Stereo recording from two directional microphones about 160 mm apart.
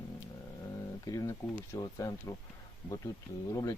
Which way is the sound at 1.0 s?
20° left (ahead or behind).